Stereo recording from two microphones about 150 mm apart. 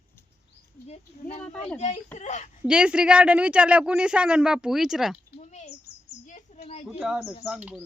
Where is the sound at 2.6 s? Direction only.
5° right (ahead or behind).